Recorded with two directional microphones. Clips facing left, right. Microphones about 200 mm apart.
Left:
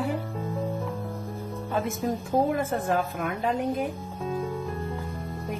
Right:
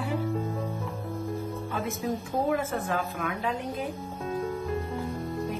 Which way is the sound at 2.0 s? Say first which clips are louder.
Left 3 dB; 50° left (ahead or behind).